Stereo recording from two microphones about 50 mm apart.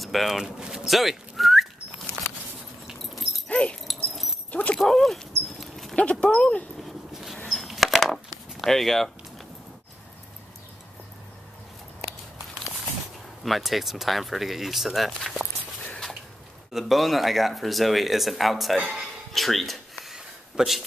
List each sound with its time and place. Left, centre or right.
0.0 s speech: centre
0.6 s speech: centre
0.8 s whistling: centre
2.9 s dog: centre
3.4 s dog: left
3.8 s dog: centre
4.5 s dog: left
4.8 s dog: centre
5.9 s speech: left
6.8 s a sound: centre
13.4 s speech: centre
16.7 s speech: centre
18.9 s doorbell: centre
20.2 s a sound: centre